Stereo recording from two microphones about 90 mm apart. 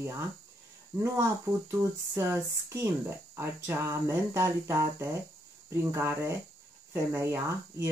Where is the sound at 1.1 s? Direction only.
30° right (ahead or behind).